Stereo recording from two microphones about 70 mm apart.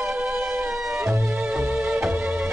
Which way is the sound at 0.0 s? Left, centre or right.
Centre.